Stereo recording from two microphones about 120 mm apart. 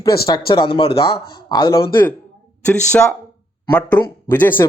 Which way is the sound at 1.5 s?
30° left (ahead or behind).